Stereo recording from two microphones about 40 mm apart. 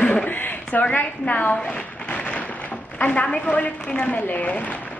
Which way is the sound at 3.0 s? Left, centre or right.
Left.